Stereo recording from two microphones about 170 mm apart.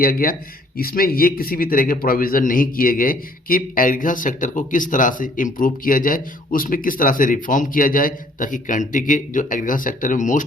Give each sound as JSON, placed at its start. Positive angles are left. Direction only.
{"t": 0.0, "sound": "a man's voice", "side_deg": 60}